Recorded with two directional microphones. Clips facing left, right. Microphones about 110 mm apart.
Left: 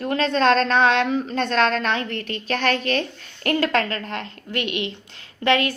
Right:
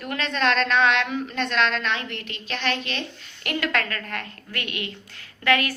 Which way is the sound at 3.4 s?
35° left (ahead or behind).